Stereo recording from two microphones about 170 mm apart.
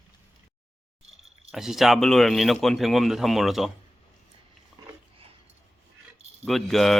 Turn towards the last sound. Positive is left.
turn(degrees=0)  # may be behind; listen again after turning